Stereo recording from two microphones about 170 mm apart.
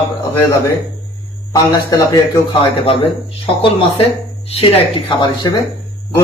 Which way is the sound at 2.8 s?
35° left (ahead or behind).